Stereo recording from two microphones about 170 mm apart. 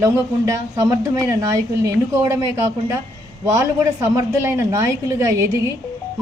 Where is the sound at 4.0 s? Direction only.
15° right (ahead or behind).